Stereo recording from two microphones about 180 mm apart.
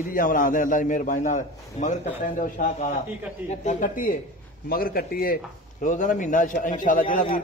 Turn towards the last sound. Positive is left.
turn(degrees=50)  # may be behind; listen again after turning